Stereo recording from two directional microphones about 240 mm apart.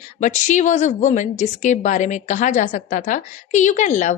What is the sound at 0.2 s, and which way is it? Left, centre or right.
A woman's voice, left.